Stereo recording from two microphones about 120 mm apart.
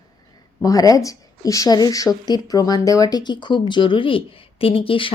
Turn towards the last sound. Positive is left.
turn(degrees=45)  # may be behind; listen again after turning